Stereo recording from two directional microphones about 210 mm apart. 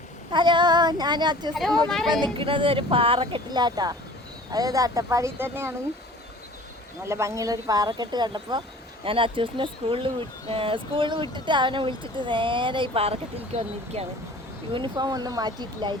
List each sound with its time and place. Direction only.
0.3 s speech: 20° right (ahead or behind)
1.5 s speech: centre (ahead or behind)
2.2 s speech: 25° right (ahead or behind)
7.0 s speech: 15° right (ahead or behind)